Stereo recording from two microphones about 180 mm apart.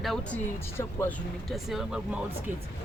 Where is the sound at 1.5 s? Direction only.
Centre (ahead or behind).